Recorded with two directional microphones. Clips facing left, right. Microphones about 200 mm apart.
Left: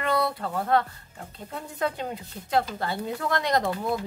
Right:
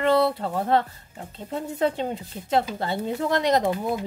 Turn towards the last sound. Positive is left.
turn(degrees=-15)  # may be behind; listen again after turning